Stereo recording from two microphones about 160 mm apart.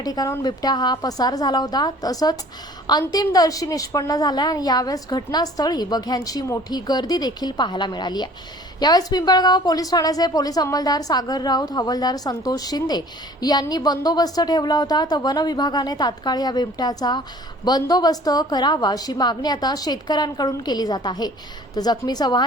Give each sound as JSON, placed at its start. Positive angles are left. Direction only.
{"t": 0.0, "sound": "a woman's voice", "side_deg": 25}